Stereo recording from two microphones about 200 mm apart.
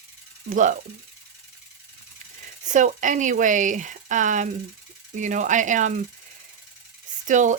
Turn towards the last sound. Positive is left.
turn(degrees=-40)  # may be behind; listen again after turning